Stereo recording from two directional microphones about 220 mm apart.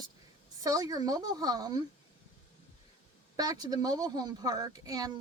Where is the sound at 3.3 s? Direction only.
15° right (ahead or behind).